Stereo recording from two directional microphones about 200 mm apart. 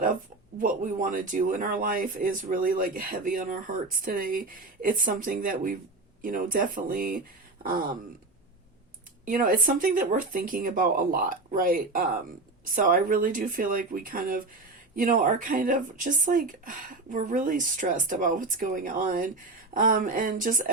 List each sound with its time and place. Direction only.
0.6 s speech: 40° right (ahead or behind)
9.2 s speech: 45° right (ahead or behind)